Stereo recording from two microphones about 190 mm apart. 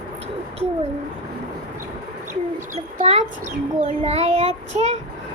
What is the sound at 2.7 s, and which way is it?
Child singing, 35° right (ahead or behind).